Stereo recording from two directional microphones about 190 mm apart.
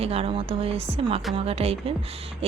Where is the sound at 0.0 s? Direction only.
30° right (ahead or behind).